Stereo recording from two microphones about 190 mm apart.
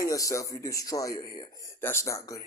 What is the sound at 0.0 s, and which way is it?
Speech, 15° left (ahead or behind).